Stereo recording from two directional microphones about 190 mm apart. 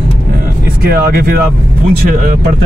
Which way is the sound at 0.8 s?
55° right (ahead or behind).